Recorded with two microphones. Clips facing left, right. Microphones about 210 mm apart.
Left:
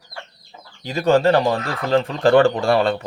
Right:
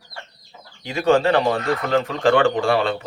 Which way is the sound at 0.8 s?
40° left (ahead or behind).